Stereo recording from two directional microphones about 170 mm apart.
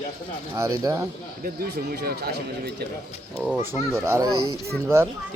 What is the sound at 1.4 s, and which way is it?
Speech, 60° right (ahead or behind).